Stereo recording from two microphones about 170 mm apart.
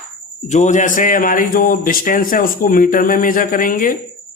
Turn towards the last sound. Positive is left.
turn(degrees=55)  # may be behind; listen again after turning